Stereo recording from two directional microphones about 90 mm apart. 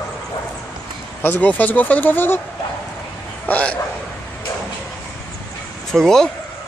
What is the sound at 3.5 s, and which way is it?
Speech, 15° left (ahead or behind).